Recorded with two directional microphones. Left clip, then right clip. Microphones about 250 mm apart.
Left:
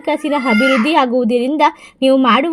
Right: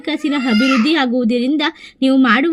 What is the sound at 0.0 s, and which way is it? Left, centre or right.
A woman's voice, left.